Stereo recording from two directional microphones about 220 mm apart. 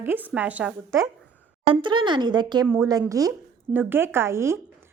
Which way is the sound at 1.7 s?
20° right (ahead or behind).